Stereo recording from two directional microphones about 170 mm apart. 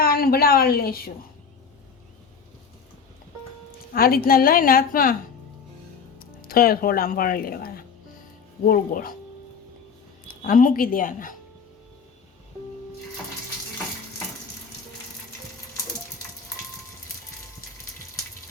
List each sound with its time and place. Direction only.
0.0 s a woman's voice: 60° left (ahead or behind)
3.9 s a woman's voice: 60° left (ahead or behind)
6.1 s a woman's voice: 60° left (ahead or behind)
10.4 s a woman's voice: 55° left (ahead or behind)